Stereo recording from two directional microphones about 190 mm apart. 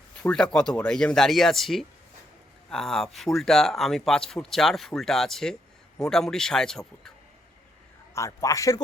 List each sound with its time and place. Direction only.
0.2 s speech: 5° left (ahead or behind)
8.1 s a man's voice: 15° left (ahead or behind)